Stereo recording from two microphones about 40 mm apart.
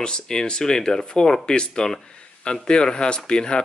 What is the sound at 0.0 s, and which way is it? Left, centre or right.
Speech, centre.